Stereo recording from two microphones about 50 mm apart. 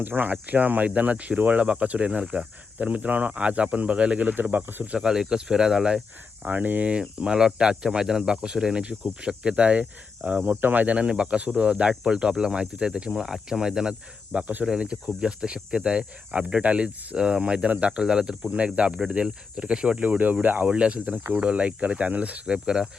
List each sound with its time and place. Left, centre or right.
0.0 s speech: right
4.3 s speech: right
4.9 s speech: centre
6.4 s speech: right
7.2 s speech: centre
18.0 s speech: centre
20.0 s speech: right; by 22.9 s centre